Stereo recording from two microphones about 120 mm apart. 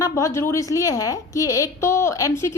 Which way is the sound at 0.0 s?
25° left (ahead or behind).